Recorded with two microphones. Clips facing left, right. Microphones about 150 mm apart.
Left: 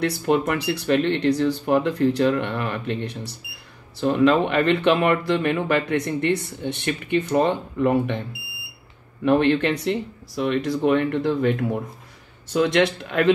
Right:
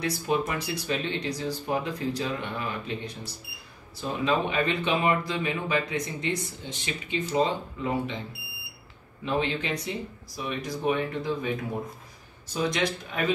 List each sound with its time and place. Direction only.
0.0 s speech: 65° left (ahead or behind)
9.2 s speech: 65° left (ahead or behind)
12.5 s speech: 75° left (ahead or behind)